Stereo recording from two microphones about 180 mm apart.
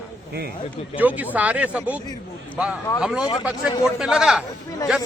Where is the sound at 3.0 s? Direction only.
5° right (ahead or behind).